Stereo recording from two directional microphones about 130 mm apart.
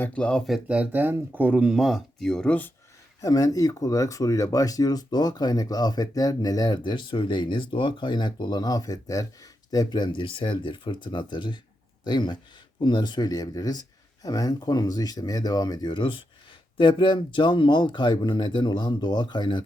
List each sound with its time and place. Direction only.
0.0 s speech: 10° left (ahead or behind)
3.2 s speech: 25° left (ahead or behind)